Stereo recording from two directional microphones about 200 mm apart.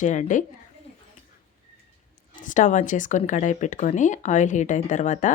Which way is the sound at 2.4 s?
40° left (ahead or behind).